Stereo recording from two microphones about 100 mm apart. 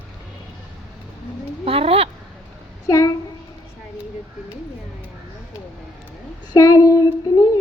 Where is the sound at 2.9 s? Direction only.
35° left (ahead or behind).